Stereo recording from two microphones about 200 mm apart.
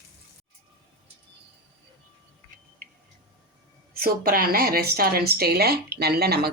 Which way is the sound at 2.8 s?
45° right (ahead or behind).